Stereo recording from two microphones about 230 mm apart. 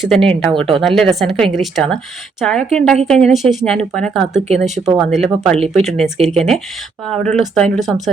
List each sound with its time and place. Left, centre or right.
0.0 s a woman's voice: centre
5.5 s speech: right
5.8 s a woman's voice: centre